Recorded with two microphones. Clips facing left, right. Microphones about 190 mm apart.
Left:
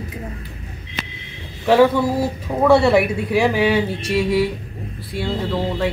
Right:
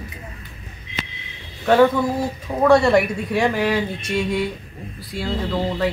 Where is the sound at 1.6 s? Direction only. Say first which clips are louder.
Left 1 dB; 5° left (ahead or behind).